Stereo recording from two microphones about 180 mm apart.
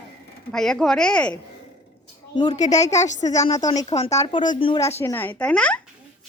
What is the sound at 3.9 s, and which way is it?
Speech, 35° left (ahead or behind).